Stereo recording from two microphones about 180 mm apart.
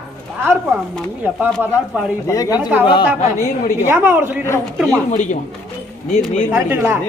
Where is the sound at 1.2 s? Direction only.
10° right (ahead or behind).